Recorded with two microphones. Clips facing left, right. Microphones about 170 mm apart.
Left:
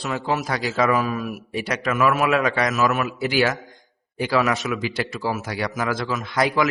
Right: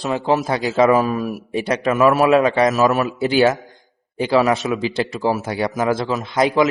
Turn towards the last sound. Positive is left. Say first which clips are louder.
# right 4 dB
turn(degrees=-20)  # may be behind; listen again after turning